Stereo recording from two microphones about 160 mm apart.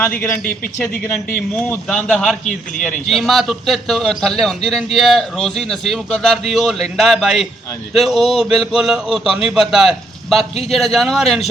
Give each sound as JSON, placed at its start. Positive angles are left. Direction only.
{"t": 1.0, "sound": "a man's voice", "side_deg": 10}